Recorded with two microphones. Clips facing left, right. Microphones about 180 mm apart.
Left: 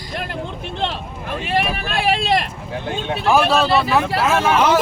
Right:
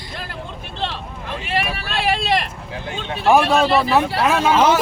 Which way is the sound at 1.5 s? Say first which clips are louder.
Left 3 dB; 20° left (ahead or behind).